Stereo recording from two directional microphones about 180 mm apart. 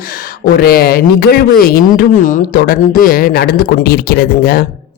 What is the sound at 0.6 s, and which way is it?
A man's voice, 60° left (ahead or behind).